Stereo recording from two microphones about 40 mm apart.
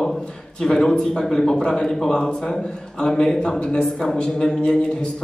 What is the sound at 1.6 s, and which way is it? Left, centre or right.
Speech, left.